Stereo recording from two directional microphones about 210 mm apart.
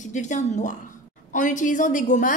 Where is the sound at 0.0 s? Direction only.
35° left (ahead or behind).